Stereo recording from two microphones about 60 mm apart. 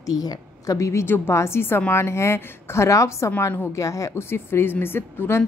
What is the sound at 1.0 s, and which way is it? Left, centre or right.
A woman's voice, left.